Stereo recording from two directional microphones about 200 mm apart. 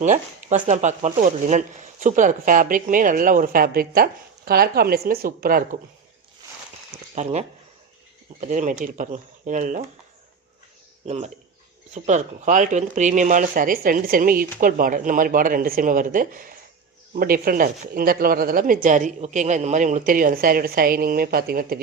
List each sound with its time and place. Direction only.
0.0 s speech: 35° right (ahead or behind)
7.2 s speech: 35° right (ahead or behind)
11.0 s speech: 35° right (ahead or behind)